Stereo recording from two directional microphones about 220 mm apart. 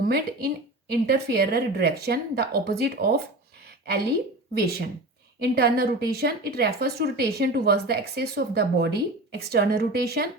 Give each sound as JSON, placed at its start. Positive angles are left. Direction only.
{"t": 0.0, "sound": "a woman's voice", "side_deg": -45}
{"t": 4.5, "sound": "a woman's voice", "side_deg": -45}